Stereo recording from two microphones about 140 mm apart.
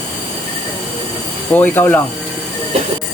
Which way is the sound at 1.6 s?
10° left (ahead or behind).